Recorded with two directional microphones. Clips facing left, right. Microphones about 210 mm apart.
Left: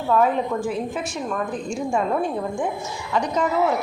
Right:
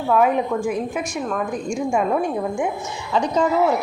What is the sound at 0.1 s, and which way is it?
Speech, 10° right (ahead or behind).